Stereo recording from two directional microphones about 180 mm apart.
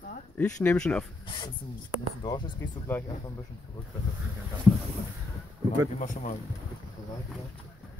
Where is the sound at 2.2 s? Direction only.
25° left (ahead or behind).